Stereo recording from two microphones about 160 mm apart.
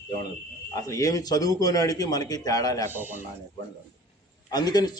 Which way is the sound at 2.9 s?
10° right (ahead or behind).